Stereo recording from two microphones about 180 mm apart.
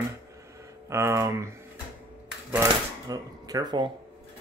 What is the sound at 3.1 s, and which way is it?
Speech, 20° right (ahead or behind).